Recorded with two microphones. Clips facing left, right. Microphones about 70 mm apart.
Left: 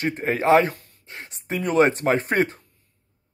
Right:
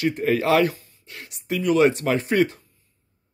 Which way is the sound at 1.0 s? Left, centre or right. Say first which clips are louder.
Right 2 dB; left.